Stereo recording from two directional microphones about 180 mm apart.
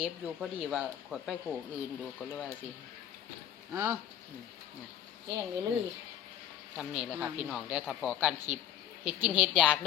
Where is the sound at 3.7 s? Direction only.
20° right (ahead or behind).